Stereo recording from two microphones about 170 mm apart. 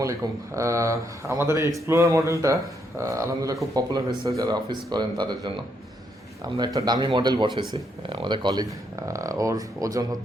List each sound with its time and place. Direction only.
0.5 s speech: 15° right (ahead or behind)
6.7 s speech: 25° right (ahead or behind)